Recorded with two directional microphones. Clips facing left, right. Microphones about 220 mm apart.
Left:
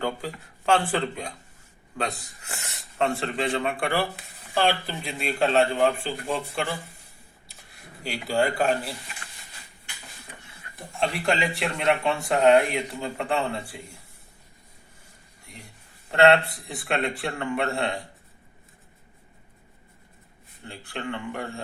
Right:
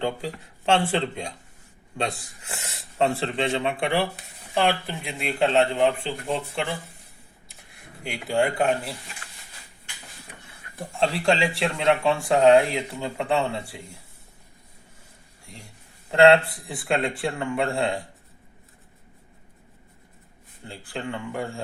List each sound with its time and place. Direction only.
0.0 s speech: 25° right (ahead or behind)
3.0 s speech: 30° right (ahead or behind)
8.0 s speech: 20° right (ahead or behind)
11.0 s speech: 25° right (ahead or behind)
16.2 s speech: 25° right (ahead or behind)
20.7 s speech: 25° right (ahead or behind)